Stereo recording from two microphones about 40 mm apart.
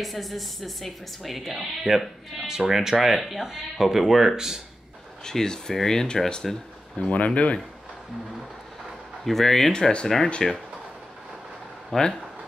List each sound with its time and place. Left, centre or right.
0.0 s speech: centre
2.4 s speech: centre
5.2 s speech: centre
7.1 s speech: left
9.2 s speech: centre
9.7 s speech: centre
10.0 s speech: centre
11.9 s speech: centre